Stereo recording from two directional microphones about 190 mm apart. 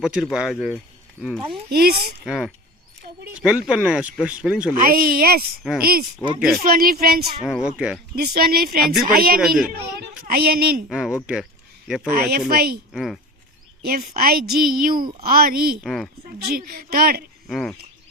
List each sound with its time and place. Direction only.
0.0 s speech: 5° right (ahead or behind)
1.7 s speech: 55° right (ahead or behind)
2.2 s speech: centre (ahead or behind)
4.7 s a woman's voice: 50° right (ahead or behind)
7.4 s speech: centre (ahead or behind)
8.1 s a woman's voice: 55° right (ahead or behind)
10.8 s speech: centre (ahead or behind)
12.1 s a woman's voice: 50° right (ahead or behind)
12.9 s speech: centre (ahead or behind)
13.8 s a woman's voice: 50° right (ahead or behind)
15.8 s speech: centre (ahead or behind)
16.2 s a woman's voice: 50° right (ahead or behind)
17.5 s speech: centre (ahead or behind)